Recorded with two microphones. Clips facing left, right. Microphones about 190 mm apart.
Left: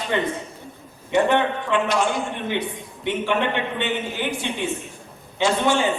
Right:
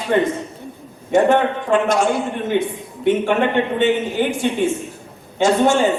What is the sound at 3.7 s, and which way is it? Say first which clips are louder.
Speech: right 8 dB; 45° right (ahead or behind).